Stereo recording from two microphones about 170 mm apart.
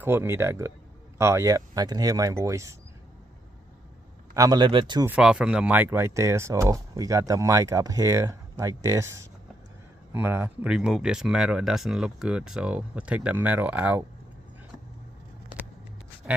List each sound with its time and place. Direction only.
0.0 s speech: 15° right (ahead or behind)
4.4 s speech: 25° right (ahead or behind)
5.0 s speech: 5° right (ahead or behind)